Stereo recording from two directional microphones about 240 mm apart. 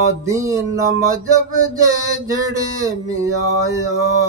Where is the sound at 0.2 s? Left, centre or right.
Centre.